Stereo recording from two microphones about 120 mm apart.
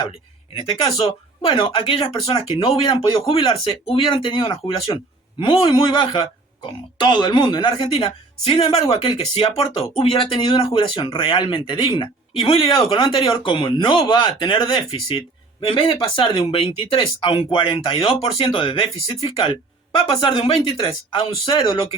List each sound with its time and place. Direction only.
0.9 s speech: 50° left (ahead or behind)
15.6 s speech: 50° left (ahead or behind)